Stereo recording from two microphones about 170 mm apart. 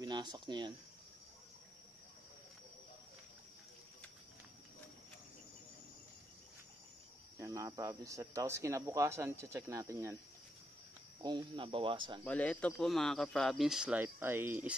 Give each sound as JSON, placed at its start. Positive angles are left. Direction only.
{"t": 0.0, "sound": "speech", "side_deg": -25}
{"t": 7.3, "sound": "speech", "side_deg": -20}
{"t": 11.2, "sound": "speech", "side_deg": -30}
{"t": 12.3, "sound": "speech", "side_deg": 10}